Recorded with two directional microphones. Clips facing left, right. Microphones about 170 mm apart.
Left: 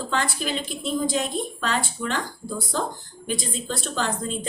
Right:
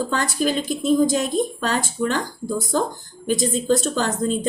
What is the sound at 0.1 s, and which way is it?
A woman's voice, 45° right (ahead or behind).